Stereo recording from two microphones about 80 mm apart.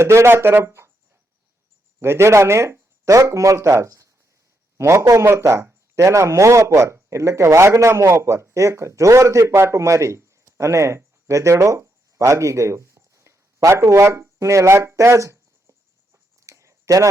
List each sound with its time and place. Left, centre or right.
0.0 s a man's voice: right
2.0 s a man's voice: right
16.1 s a sound: right